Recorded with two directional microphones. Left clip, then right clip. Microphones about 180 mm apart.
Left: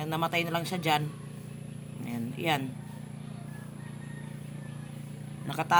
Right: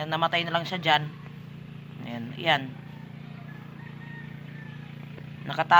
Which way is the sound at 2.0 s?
10° left (ahead or behind).